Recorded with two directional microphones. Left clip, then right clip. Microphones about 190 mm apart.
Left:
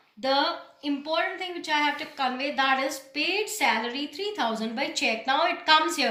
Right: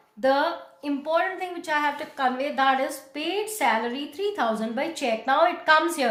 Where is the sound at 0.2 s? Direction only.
50° right (ahead or behind).